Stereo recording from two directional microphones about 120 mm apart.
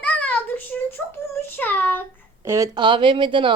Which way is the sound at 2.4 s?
25° right (ahead or behind).